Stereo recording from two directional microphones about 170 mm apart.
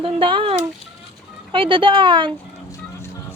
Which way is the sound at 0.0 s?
30° right (ahead or behind).